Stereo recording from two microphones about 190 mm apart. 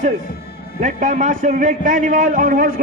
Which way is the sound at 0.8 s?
40° right (ahead or behind).